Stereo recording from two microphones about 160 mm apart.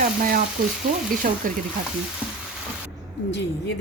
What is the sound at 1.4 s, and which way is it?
Frying, 60° right (ahead or behind).